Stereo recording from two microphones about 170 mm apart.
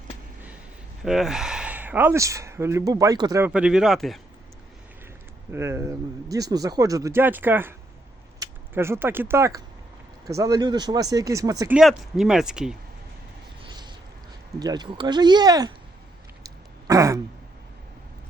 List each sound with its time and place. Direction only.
1.0 s speech: centre (ahead or behind); by 3.4 s 20° right (ahead or behind)
3.4 s speech: 5° right (ahead or behind)
5.5 s speech: 15° right (ahead or behind)
11.7 s speech: centre (ahead or behind)
13.7 s boat: 25° right (ahead or behind)
14.6 s speech: 25° right (ahead or behind)
16.8 s throat clearing: 20° right (ahead or behind)